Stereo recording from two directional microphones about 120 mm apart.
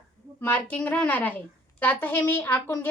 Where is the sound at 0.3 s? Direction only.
15° left (ahead or behind).